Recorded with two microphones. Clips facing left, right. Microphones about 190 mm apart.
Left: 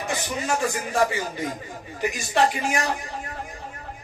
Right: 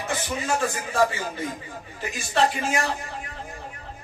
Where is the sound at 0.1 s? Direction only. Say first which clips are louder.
Even; 15° left (ahead or behind).